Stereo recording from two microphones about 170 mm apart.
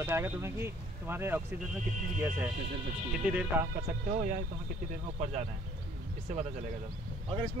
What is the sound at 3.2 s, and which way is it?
Speech, 5° right (ahead or behind).